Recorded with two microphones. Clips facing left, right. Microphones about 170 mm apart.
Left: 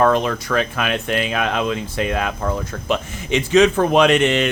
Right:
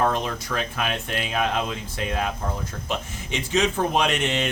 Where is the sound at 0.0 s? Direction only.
80° left.